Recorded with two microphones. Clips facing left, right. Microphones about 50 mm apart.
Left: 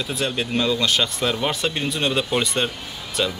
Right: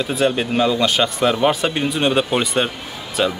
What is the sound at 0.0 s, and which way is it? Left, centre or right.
A woman's voice, centre.